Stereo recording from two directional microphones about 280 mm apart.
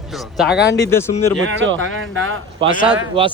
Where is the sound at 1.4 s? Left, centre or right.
Right.